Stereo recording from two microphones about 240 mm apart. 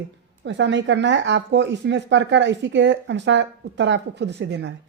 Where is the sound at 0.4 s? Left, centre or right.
Right.